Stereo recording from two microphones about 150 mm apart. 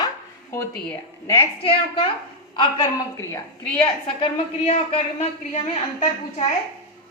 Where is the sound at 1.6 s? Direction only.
40° left (ahead or behind).